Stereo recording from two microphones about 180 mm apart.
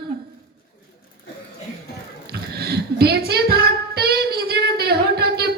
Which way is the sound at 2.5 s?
65° right (ahead or behind).